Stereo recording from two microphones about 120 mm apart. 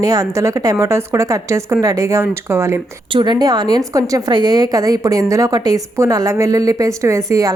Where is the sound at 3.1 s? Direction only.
35° right (ahead or behind).